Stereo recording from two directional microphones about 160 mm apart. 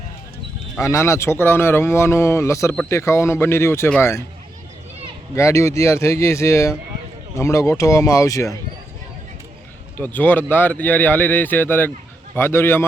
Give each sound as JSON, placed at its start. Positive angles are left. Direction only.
{"t": 0.8, "sound": "speech", "side_deg": 15}
{"t": 5.3, "sound": "speech", "side_deg": 20}
{"t": 10.2, "sound": "speech", "side_deg": 10}